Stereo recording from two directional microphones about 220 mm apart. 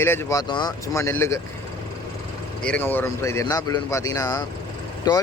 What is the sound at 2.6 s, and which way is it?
Speech, 5° left (ahead or behind).